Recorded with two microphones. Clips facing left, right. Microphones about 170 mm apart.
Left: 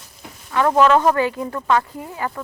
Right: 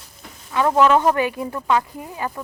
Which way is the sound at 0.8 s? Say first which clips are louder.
Left 1 dB; 10° right (ahead or behind).